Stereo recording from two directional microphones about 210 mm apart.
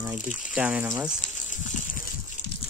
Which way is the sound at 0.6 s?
5° right (ahead or behind).